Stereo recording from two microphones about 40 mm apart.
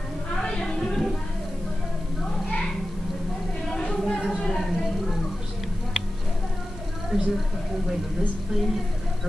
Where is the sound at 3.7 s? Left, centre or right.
Centre.